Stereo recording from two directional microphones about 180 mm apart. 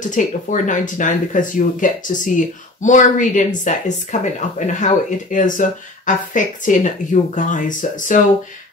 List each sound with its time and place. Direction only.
0.1 s speech: 45° left (ahead or behind)